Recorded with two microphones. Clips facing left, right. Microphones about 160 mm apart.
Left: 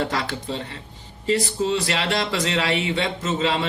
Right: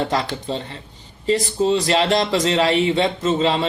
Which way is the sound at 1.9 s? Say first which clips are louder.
Right 6 dB; 20° right (ahead or behind).